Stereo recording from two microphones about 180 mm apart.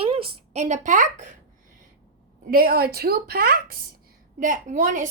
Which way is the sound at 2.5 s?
55° right (ahead or behind).